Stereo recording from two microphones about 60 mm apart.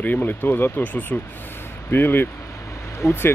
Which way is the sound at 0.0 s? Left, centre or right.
Left.